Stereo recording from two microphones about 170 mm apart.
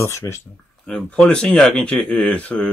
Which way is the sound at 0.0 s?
15° left (ahead or behind).